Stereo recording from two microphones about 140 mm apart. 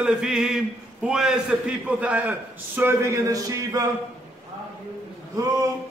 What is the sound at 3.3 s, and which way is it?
Speech, 25° right (ahead or behind).